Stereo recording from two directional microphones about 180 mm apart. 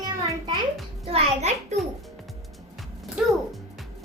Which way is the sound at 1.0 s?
35° right (ahead or behind).